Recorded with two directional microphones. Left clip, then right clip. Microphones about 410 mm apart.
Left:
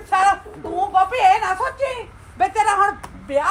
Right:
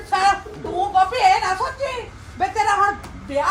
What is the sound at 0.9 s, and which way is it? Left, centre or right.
A woman's voice, left.